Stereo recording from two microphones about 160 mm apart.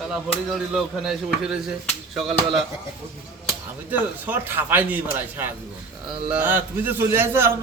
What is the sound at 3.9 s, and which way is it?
A man's voice, 10° right (ahead or behind).